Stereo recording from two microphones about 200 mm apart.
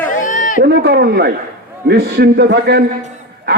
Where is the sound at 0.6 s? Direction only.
55° right (ahead or behind).